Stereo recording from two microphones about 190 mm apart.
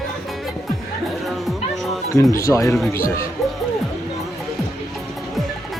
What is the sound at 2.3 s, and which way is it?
Speech, 15° left (ahead or behind).